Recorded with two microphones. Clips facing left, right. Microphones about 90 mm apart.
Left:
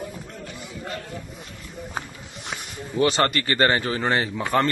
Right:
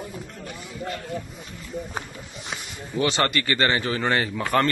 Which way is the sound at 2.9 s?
35° left (ahead or behind).